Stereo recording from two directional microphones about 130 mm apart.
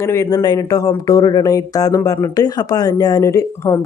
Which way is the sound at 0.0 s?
20° left (ahead or behind).